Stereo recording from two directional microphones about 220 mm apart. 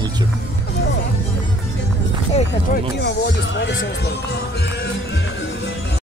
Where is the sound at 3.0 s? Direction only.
50° left (ahead or behind).